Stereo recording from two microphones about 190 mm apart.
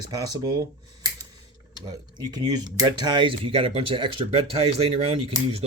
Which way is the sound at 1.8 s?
20° right (ahead or behind).